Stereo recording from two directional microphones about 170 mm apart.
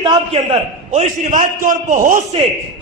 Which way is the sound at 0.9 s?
50° right (ahead or behind).